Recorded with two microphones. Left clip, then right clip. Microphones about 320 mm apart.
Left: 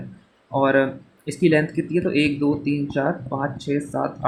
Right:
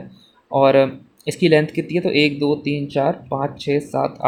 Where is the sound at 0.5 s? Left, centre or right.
Centre.